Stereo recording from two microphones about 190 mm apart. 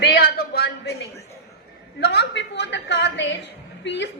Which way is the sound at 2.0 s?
60° left (ahead or behind).